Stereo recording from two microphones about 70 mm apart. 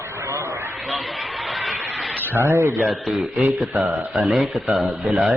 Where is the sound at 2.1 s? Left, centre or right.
Right.